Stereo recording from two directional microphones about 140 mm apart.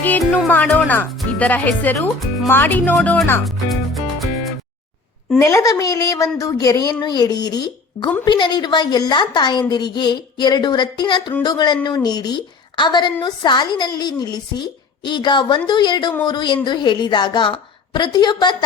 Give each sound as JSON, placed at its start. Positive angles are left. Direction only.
{"t": 0.0, "sound": "speech", "side_deg": 10}
{"t": 3.4, "sound": "music", "side_deg": 0}
{"t": 5.4, "sound": "a woman's voice", "side_deg": 20}